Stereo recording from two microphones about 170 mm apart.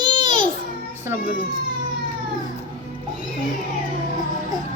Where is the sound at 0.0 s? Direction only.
25° right (ahead or behind).